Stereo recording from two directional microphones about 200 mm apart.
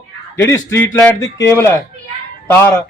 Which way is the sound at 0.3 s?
10° left (ahead or behind).